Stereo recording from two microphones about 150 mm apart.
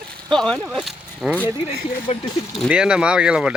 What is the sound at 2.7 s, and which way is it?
Speech, 5° right (ahead or behind).